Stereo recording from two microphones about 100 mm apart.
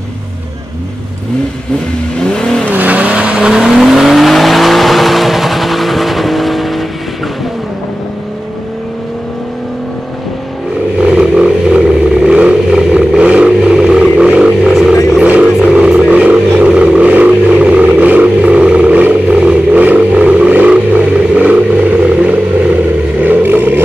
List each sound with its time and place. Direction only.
2.1 s vehicle: 5° left (ahead or behind)
2.7 s vehicle: 15° right (ahead or behind)
11.0 s vehicle: 10° right (ahead or behind)
15.1 s a sound: 10° right (ahead or behind)
23.2 s vehicle: 20° right (ahead or behind)